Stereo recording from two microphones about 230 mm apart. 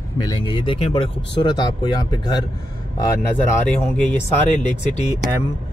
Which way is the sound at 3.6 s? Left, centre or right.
Centre.